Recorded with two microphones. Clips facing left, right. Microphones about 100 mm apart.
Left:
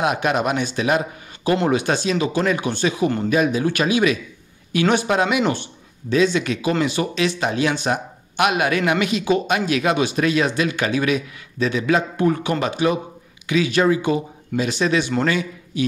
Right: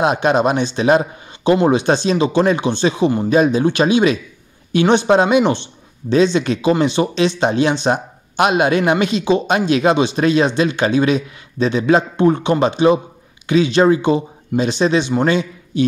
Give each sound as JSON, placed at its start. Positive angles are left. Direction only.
{"t": 0.0, "sound": "a man's voice", "side_deg": -30}